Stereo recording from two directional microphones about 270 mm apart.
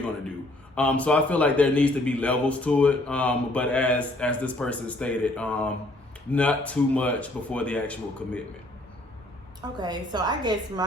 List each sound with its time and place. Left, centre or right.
0.8 s a man's voice: centre
9.8 s a woman's voice: centre